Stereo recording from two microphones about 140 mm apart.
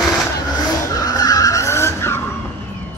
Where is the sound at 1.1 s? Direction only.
25° left (ahead or behind).